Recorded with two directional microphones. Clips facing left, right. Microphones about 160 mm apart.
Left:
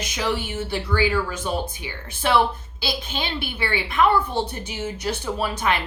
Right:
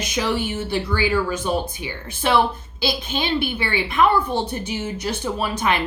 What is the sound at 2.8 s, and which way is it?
A woman's voice, 20° right (ahead or behind).